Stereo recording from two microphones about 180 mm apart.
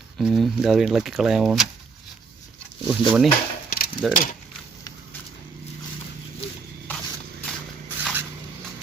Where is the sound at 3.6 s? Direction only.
55° left (ahead or behind).